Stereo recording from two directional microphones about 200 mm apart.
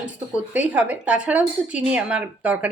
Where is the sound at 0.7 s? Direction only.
5° right (ahead or behind).